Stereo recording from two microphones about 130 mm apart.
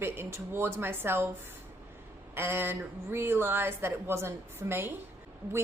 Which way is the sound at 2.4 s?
20° right (ahead or behind).